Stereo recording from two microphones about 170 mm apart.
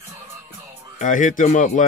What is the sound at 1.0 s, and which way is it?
Speech, 50° left (ahead or behind).